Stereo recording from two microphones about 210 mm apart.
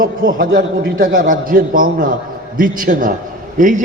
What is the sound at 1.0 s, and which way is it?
A man's voice, 40° right (ahead or behind).